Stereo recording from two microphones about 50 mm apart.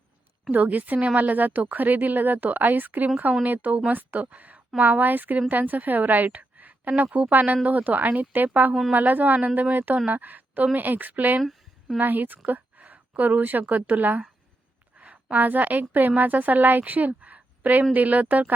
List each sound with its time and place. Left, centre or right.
0.5 s a woman's voice: right